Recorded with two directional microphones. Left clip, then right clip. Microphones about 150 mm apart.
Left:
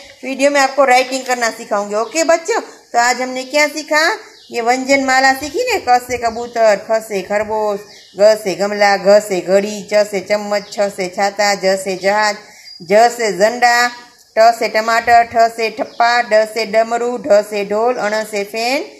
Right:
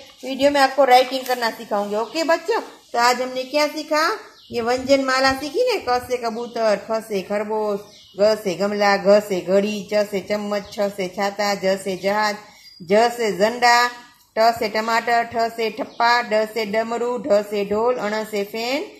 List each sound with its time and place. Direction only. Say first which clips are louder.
0.2 s a woman's voice: left 4 dB; 30° left (ahead or behind)